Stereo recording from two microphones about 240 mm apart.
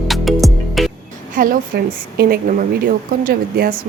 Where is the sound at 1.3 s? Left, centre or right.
Right.